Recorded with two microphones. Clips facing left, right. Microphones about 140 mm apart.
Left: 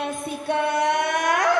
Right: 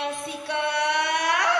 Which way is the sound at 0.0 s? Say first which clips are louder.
Left 2 dB; 45° left (ahead or behind).